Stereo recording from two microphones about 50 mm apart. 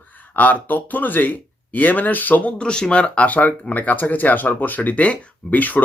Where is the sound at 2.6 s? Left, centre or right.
Centre.